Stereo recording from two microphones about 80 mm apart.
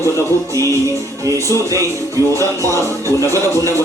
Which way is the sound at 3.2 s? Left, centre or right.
Right.